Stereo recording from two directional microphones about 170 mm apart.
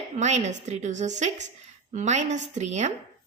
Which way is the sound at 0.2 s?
45° right (ahead or behind).